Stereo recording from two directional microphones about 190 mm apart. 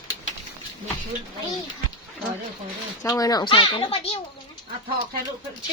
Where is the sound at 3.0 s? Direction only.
20° left (ahead or behind).